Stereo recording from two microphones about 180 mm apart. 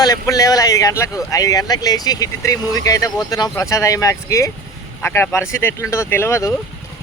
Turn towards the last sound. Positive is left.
turn(degrees=15)  # may be behind; listen again after turning